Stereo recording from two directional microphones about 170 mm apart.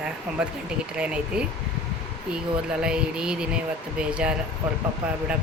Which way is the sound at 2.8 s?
5° right (ahead or behind).